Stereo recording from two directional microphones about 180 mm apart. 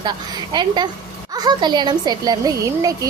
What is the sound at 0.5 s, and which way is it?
Speech, 25° right (ahead or behind).